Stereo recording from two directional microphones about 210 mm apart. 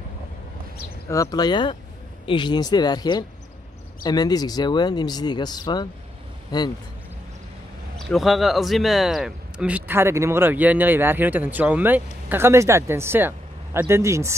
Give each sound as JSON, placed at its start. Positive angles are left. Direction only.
{"t": 1.0, "sound": "speech", "side_deg": 15}
{"t": 8.0, "sound": "speech", "side_deg": 0}